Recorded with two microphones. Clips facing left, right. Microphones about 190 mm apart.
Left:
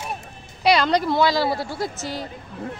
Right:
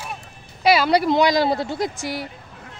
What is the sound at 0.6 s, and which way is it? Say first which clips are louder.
A woman's voice: right 2 dB; 5° right (ahead or behind).